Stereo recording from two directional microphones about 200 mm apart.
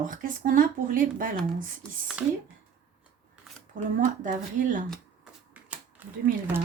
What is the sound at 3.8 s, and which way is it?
Speech, 40° right (ahead or behind).